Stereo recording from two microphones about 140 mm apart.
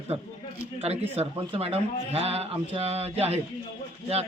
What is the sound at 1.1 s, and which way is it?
Speech, 45° right (ahead or behind).